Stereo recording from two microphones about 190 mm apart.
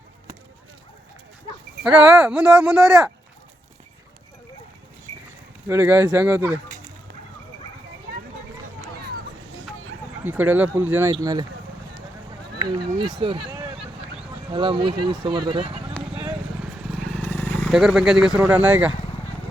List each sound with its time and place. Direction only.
1.8 s speech: 5° right (ahead or behind)
5.6 s speech: 10° right (ahead or behind)
10.2 s speech: 10° right (ahead or behind)
12.6 s speech: 20° right (ahead or behind)
16.1 s a sound: 10° right (ahead or behind)
16.9 s vehicle: 5° left (ahead or behind)
17.7 s speech: centre (ahead or behind)